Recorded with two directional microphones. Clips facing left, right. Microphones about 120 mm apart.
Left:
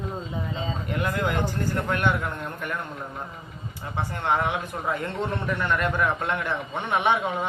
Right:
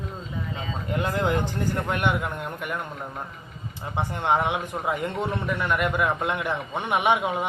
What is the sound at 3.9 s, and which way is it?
A man's voice, 20° right (ahead or behind).